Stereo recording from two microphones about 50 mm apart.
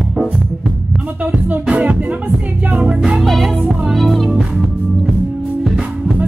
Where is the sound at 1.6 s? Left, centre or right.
Right.